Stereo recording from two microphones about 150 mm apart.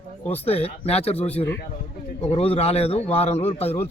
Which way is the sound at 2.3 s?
40° left (ahead or behind).